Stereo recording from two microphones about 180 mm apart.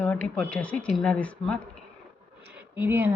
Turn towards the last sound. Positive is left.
turn(degrees=-10)  # may be behind; listen again after turning